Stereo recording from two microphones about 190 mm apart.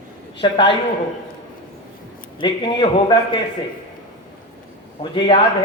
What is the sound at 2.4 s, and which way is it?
Speech, 25° left (ahead or behind).